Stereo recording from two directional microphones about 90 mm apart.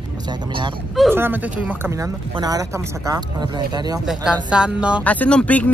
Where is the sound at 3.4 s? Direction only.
50° right (ahead or behind).